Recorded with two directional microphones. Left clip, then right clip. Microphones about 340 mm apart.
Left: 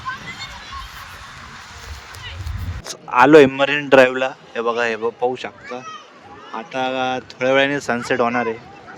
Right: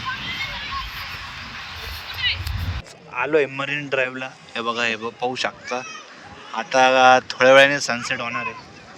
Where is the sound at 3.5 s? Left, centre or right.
Centre.